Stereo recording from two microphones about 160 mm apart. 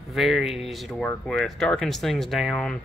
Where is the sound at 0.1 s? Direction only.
Centre (ahead or behind).